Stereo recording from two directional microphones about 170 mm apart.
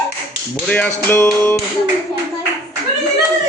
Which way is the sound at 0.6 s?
10° left (ahead or behind).